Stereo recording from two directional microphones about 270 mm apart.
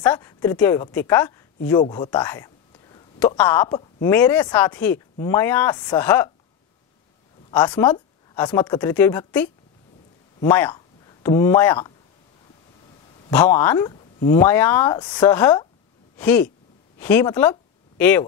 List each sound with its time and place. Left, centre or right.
0.0 s a woman's voice: centre
7.7 s speech: centre
13.3 s speech: centre